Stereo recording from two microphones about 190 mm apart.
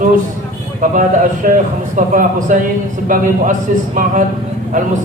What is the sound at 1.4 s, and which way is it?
A man's voice, 50° right (ahead or behind).